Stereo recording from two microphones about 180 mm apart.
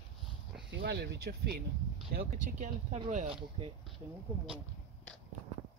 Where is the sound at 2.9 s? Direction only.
35° right (ahead or behind).